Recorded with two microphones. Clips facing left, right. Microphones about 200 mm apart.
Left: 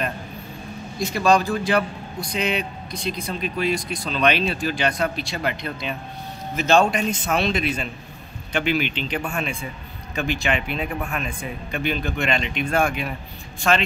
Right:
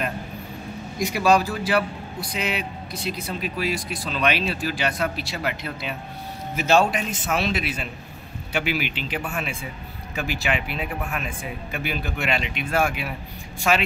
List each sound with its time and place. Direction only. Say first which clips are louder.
0.9 s a man's voice: left 1 dB; 10° right (ahead or behind)